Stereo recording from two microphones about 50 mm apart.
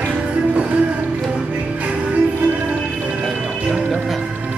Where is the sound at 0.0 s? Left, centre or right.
Right.